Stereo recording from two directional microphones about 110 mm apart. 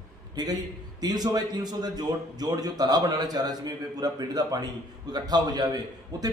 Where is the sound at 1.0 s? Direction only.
35° right (ahead or behind).